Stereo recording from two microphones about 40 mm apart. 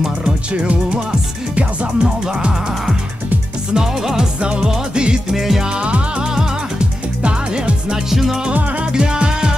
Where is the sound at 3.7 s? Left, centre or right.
Centre.